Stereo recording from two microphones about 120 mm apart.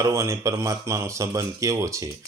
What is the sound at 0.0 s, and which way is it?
Speech, 25° right (ahead or behind).